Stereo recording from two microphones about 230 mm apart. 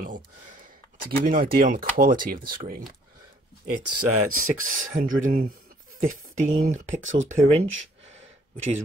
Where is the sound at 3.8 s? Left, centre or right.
Right.